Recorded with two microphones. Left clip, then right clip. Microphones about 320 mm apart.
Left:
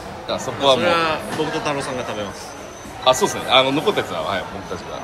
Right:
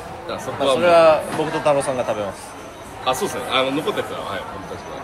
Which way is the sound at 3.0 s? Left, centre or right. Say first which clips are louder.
Left 5 dB; centre.